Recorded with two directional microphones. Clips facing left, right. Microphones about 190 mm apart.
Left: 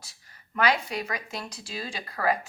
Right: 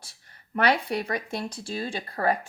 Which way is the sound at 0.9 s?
30° right (ahead or behind).